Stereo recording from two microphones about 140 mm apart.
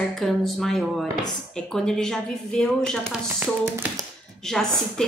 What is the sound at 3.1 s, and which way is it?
Speech, 15° right (ahead or behind).